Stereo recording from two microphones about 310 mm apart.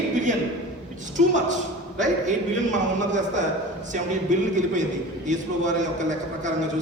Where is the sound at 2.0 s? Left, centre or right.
Right.